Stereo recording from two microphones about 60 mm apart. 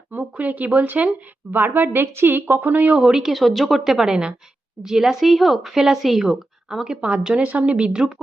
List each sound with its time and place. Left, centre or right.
0.1 s a woman's voice: right
2.9 s speech: centre